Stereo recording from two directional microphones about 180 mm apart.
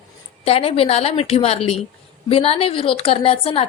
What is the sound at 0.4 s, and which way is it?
A woman's voice, 35° left (ahead or behind).